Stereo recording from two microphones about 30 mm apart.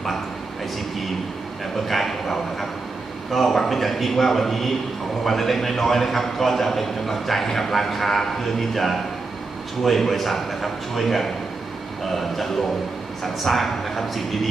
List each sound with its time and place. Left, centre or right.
1.9 s a man's voice: centre
13.2 s a man's voice: centre